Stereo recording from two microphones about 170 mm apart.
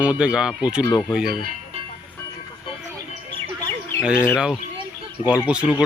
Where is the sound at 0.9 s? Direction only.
15° left (ahead or behind).